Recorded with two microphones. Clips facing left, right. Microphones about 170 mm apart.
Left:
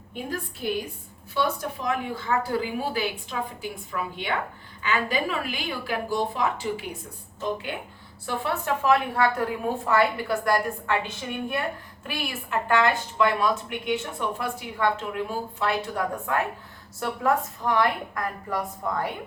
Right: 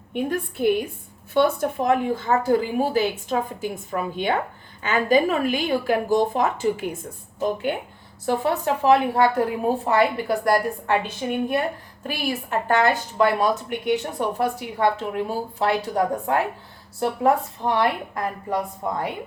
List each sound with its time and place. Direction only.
0.1 s a woman's voice: 60° right (ahead or behind)
8.3 s a woman's voice: 40° right (ahead or behind); by 19.1 s 20° right (ahead or behind)